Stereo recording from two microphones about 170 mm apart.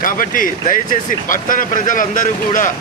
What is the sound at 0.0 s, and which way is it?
Speech, 55° left (ahead or behind).